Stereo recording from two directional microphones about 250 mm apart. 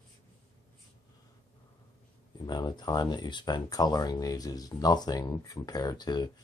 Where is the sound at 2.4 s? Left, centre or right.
Centre.